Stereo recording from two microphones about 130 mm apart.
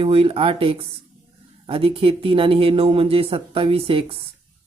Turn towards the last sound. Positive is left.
turn(degrees=-45)  # may be behind; listen again after turning